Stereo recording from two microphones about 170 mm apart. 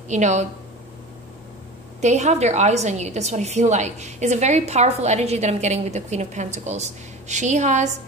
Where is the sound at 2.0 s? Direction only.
45° right (ahead or behind).